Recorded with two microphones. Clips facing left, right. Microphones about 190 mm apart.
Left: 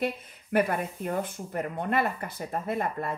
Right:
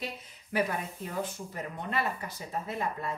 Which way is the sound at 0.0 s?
55° left (ahead or behind).